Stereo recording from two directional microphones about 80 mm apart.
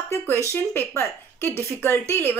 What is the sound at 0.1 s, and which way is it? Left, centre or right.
A woman's voice, left.